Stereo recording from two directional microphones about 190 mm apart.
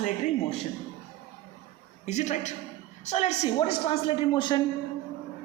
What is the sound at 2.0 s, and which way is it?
A woman's voice, 40° left (ahead or behind).